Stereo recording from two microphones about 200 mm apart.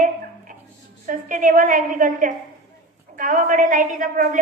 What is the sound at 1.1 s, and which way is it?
A woman's voice, 40° right (ahead or behind).